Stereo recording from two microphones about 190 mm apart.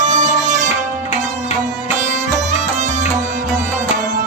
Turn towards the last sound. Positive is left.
turn(degrees=-40)  # may be behind; listen again after turning